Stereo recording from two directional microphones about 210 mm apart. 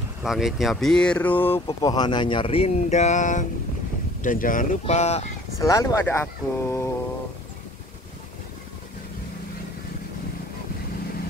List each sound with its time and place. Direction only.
0.2 s speech: centre (ahead or behind)
1.7 s speech: 20° left (ahead or behind)
5.6 s speech: 15° left (ahead or behind)